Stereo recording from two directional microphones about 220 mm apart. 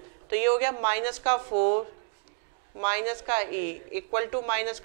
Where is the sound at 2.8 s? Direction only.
15° right (ahead or behind).